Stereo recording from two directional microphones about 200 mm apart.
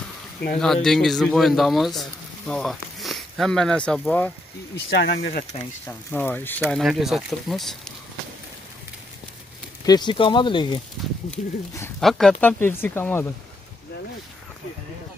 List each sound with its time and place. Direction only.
0.8 s speech: centre (ahead or behind)
4.9 s speech: 60° left (ahead or behind)
5.9 s speech: 10° left (ahead or behind)
9.8 s speech: 20° left (ahead or behind)
11.2 s speech: 15° left (ahead or behind)
12.0 s speech: centre (ahead or behind)